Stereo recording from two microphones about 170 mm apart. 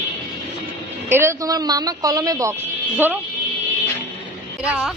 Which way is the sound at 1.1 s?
15° right (ahead or behind).